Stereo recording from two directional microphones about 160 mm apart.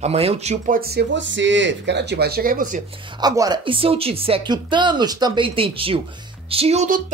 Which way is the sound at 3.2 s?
25° right (ahead or behind).